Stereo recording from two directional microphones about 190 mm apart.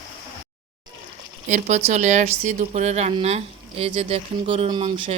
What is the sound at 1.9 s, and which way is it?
Speech, 40° right (ahead or behind).